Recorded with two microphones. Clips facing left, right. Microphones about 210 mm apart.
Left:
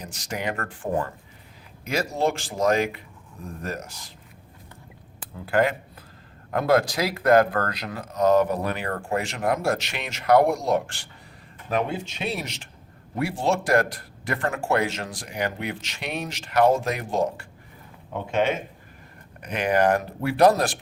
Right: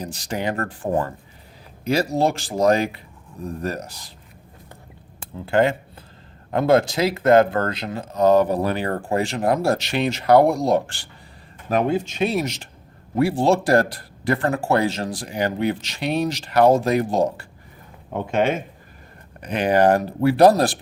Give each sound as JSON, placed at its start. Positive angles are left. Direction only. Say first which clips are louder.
{"t": 0.0, "sound": "speech", "louder": "right 5 dB", "side_deg": -35}
{"t": 5.2, "sound": "speech", "louder": "right 4 dB", "side_deg": -25}
{"t": 11.7, "sound": "speech", "louder": "right 6 dB", "side_deg": -45}
{"t": 18.3, "sound": "speech", "louder": "right 3 dB", "side_deg": -45}
{"t": 19.4, "sound": "speech", "louder": "right 4 dB", "side_deg": -30}